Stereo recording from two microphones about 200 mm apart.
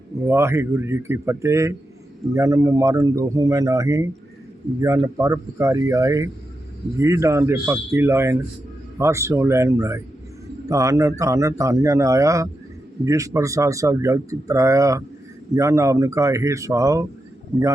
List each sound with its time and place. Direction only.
0.3 s speech: 10° right (ahead or behind)